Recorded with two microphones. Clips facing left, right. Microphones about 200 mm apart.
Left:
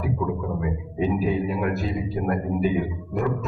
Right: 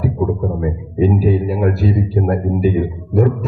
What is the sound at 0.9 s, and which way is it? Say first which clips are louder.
Speech: right 8 dB; 35° right (ahead or behind).